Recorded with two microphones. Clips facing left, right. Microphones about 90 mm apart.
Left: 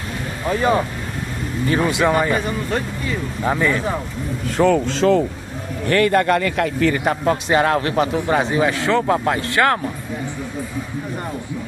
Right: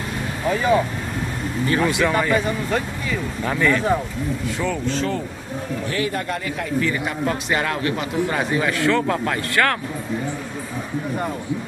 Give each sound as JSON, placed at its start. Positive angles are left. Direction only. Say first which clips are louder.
{"t": 1.7, "sound": "speech", "louder": "left 2 dB", "side_deg": 20}
{"t": 3.4, "sound": "speech", "louder": "left 1 dB", "side_deg": 15}
{"t": 4.6, "sound": "speech", "louder": "left 10 dB", "side_deg": 90}
{"t": 5.9, "sound": "a man's voice", "louder": "left 11 dB", "side_deg": 70}
{"t": 7.2, "sound": "speech", "louder": "left 6 dB", "side_deg": 30}